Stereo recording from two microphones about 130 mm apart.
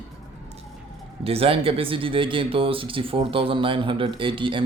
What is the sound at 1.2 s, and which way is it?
Speech, 50° right (ahead or behind).